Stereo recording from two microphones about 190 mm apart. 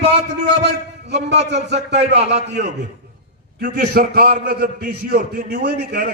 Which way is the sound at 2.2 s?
35° right (ahead or behind).